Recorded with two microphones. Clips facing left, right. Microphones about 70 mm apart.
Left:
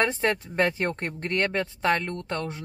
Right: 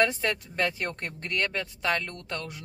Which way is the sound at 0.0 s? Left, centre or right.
Left.